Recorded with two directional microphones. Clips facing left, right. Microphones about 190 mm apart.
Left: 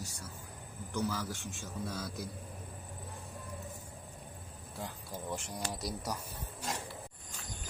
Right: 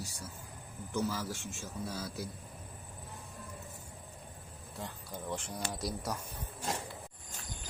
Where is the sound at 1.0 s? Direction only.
10° right (ahead or behind).